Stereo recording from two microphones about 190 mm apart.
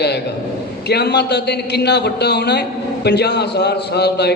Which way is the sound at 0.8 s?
60° left (ahead or behind).